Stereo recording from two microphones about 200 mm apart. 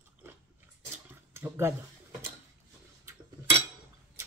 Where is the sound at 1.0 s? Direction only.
10° right (ahead or behind).